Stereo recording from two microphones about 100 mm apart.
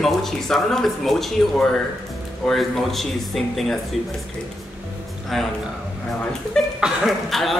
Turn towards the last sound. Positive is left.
turn(degrees=0)  # may be behind; listen again after turning